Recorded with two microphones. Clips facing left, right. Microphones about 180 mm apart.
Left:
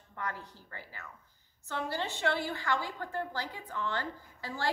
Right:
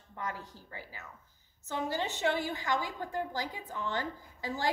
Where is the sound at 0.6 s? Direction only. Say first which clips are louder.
Right 1 dB; 15° right (ahead or behind).